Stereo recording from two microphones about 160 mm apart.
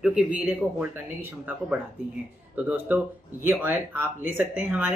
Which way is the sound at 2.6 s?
10° right (ahead or behind).